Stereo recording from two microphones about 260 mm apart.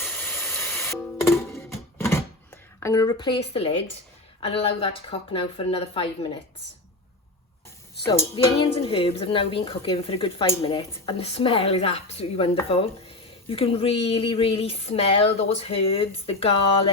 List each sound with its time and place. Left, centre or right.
0.0 s a sound: centre
1.2 s music: centre
2.8 s speech: centre
8.6 s speech: centre